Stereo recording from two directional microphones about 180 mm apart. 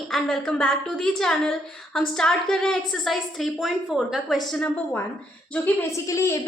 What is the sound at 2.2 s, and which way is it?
A woman's voice, 5° left (ahead or behind).